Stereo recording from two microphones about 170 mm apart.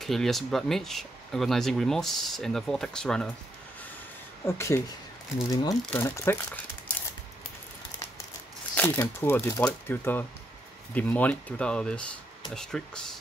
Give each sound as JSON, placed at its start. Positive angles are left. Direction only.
{"t": 0.0, "sound": "speech", "side_deg": 0}
{"t": 4.5, "sound": "speech", "side_deg": 15}
{"t": 8.7, "sound": "speech", "side_deg": 15}